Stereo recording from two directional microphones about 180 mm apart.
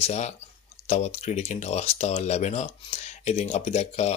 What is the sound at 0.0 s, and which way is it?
Speech, 40° left (ahead or behind).